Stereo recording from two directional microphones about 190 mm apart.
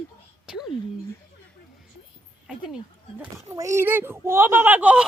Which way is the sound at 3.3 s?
15° right (ahead or behind).